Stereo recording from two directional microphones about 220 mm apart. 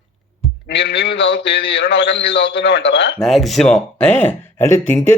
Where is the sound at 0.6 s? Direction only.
50° left (ahead or behind).